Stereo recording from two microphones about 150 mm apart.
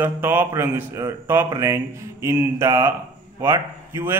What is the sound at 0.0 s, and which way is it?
A man's voice, 15° right (ahead or behind).